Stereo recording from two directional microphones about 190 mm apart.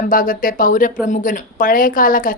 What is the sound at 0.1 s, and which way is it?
Speech, 45° left (ahead or behind).